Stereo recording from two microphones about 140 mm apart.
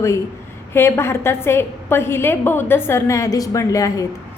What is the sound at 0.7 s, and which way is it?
A woman's voice, 15° left (ahead or behind).